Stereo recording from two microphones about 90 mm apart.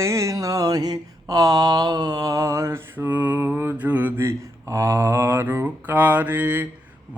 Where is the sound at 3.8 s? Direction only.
20° right (ahead or behind).